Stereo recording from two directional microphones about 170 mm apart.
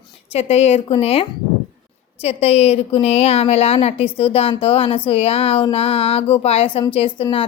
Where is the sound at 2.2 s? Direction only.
40° left (ahead or behind).